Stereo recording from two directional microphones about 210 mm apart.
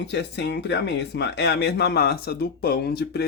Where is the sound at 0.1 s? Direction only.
55° left (ahead or behind).